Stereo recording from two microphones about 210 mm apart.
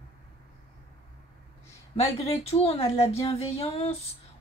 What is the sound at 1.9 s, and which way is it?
Speech, 30° left (ahead or behind).